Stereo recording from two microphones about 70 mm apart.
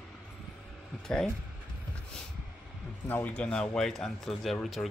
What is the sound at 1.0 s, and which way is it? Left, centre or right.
Speech, centre.